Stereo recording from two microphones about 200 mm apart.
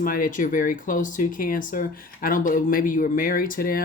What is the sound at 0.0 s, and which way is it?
Speech, 45° left (ahead or behind).